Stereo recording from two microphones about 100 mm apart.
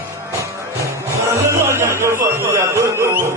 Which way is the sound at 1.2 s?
30° right (ahead or behind).